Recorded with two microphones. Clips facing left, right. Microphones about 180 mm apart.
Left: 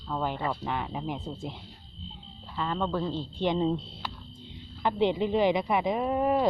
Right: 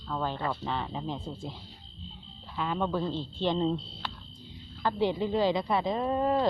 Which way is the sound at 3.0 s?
15° left (ahead or behind).